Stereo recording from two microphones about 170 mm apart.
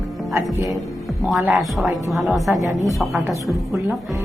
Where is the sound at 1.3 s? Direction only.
5° right (ahead or behind).